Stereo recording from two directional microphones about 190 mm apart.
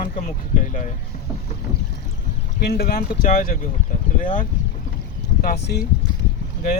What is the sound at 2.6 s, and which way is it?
Speech, 55° left (ahead or behind).